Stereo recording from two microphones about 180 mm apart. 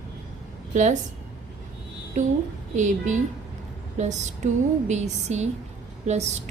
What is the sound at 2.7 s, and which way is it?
Speech, 40° right (ahead or behind).